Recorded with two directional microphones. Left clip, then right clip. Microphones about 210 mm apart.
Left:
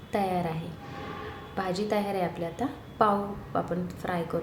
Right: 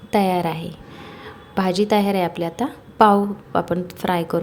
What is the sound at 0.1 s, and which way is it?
A woman's voice, 45° right (ahead or behind).